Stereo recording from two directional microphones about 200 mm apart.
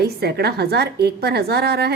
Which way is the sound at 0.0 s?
55° right (ahead or behind).